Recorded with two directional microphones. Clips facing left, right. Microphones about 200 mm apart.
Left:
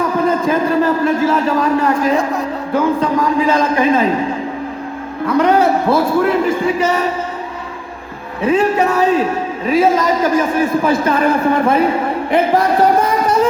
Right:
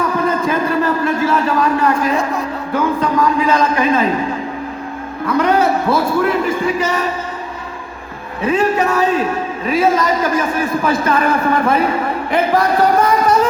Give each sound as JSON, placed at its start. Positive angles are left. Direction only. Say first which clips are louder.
{"t": 0.0, "sound": "a man's voice", "louder": "left 2 dB", "side_deg": 30}
{"t": 5.2, "sound": "a man's voice", "louder": "left 2 dB", "side_deg": 30}
{"t": 8.4, "sound": "a man's voice", "louder": "left 2 dB", "side_deg": 30}